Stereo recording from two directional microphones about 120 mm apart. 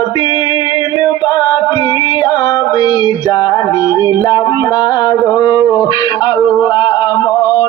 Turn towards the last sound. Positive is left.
turn(degrees=35)  # may be behind; listen again after turning